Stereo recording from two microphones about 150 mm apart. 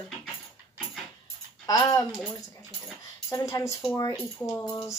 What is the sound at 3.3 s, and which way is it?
Speech, 20° left (ahead or behind).